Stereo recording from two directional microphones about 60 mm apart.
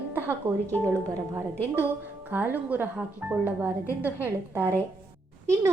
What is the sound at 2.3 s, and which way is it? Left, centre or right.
A woman's voice, right.